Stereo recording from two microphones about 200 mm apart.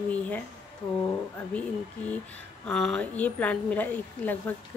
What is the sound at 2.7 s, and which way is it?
A woman's voice, 5° left (ahead or behind).